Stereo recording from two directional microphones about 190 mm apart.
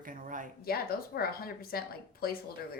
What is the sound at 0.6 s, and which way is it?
A woman's voice, 50° left (ahead or behind).